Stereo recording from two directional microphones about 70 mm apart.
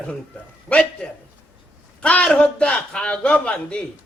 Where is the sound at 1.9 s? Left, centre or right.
Centre.